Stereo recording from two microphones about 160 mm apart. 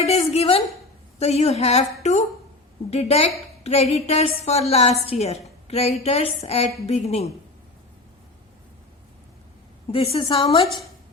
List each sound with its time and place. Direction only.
0.0 s a woman's voice: 40° left (ahead or behind)
9.9 s a woman's voice: 35° left (ahead or behind)